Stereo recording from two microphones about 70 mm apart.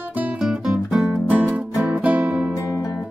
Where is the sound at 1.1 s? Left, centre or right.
Right.